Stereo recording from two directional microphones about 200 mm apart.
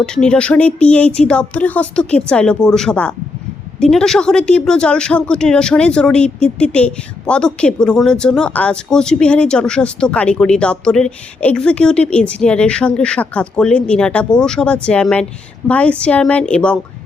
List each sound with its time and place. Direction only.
0.0 s speech: 5° left (ahead or behind)